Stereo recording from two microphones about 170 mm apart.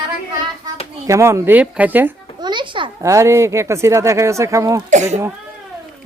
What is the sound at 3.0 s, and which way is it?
Speech, 15° right (ahead or behind).